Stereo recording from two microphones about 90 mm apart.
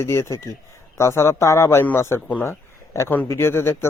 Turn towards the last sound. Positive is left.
turn(degrees=30)  # may be behind; listen again after turning